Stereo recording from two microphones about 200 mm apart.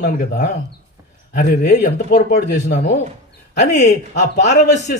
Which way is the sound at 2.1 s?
55° left (ahead or behind).